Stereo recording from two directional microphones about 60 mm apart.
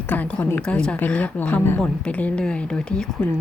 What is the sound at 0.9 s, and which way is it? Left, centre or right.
A woman's voice, left.